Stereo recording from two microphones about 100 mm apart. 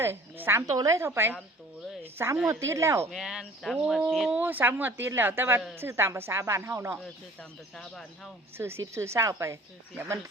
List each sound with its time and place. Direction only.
0.0 s a woman's voice: 20° right (ahead or behind)
0.7 s a woman's voice: 35° right (ahead or behind)
3.1 s speech: 5° right (ahead or behind)
4.4 s a woman's voice: 20° right (ahead or behind)
7.8 s speech: 5° left (ahead or behind)
8.5 s a woman's voice: 25° right (ahead or behind)